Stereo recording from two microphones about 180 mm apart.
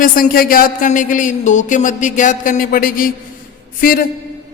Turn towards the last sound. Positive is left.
turn(degrees=50)  # may be behind; listen again after turning